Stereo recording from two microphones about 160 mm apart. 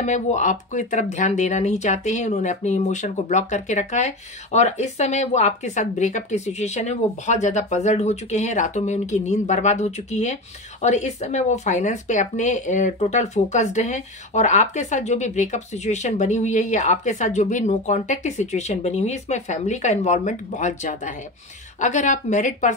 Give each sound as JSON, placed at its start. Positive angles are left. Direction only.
{"t": 0.0, "sound": "speech", "side_deg": 50}